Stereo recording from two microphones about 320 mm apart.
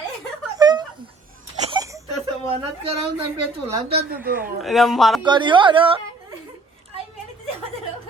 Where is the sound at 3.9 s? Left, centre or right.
Right.